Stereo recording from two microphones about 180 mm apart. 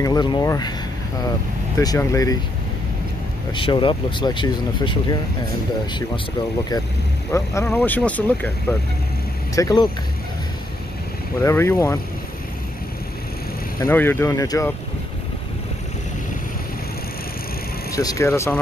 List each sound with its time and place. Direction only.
0.0 s speech: 20° left (ahead or behind)
1.8 s speech: 20° left (ahead or behind)
3.5 s speech: 30° left (ahead or behind)
7.3 s speech: 15° left (ahead or behind)
11.4 s speech: 15° left (ahead or behind)
13.7 s speech: 10° left (ahead or behind)
17.9 s speech: 15° left (ahead or behind)